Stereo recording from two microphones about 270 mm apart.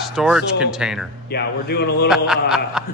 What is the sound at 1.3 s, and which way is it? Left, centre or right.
Speech, left.